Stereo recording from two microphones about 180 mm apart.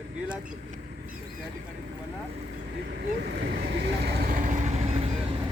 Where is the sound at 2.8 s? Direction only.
60° right (ahead or behind); by 5.1 s 35° right (ahead or behind).